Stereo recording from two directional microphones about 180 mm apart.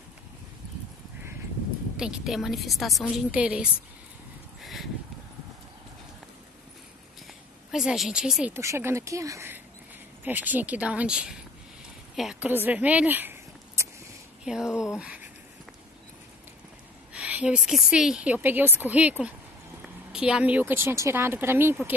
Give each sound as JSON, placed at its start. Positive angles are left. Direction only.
{"t": 2.0, "sound": "a woman's voice", "side_deg": -5}
{"t": 4.6, "sound": "a sound", "side_deg": 0}
{"t": 7.7, "sound": "a woman's voice", "side_deg": -5}
{"t": 17.1, "sound": "a woman's voice", "side_deg": -5}